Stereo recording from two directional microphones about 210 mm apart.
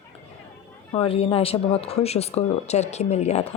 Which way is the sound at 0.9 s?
25° left (ahead or behind).